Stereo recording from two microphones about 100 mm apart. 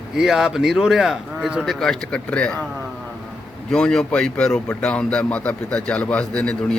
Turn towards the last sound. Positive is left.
turn(degrees=10)  # may be behind; listen again after turning